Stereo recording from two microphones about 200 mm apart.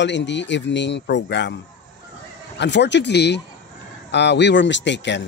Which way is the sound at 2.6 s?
60° left (ahead or behind).